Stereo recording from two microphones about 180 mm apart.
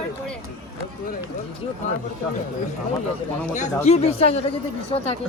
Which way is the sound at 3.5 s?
40° left (ahead or behind).